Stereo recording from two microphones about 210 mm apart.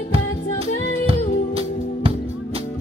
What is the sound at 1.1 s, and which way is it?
Music, 25° right (ahead or behind).